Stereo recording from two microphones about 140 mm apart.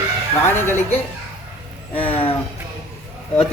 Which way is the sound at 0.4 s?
20° left (ahead or behind).